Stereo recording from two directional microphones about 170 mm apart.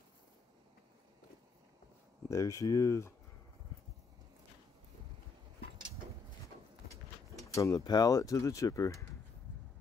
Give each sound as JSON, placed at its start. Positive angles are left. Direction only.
{"t": 2.2, "sound": "speech", "side_deg": 20}
{"t": 7.5, "sound": "speech", "side_deg": 20}